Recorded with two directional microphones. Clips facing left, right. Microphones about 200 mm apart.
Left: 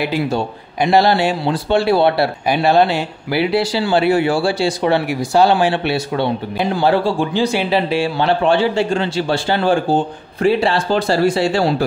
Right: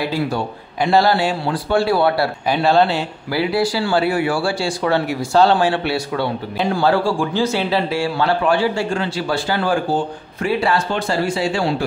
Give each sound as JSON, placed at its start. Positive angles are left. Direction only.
{"t": 0.8, "sound": "speech", "side_deg": 20}